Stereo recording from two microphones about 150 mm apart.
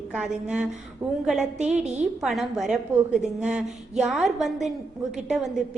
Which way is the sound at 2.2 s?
Centre (ahead or behind).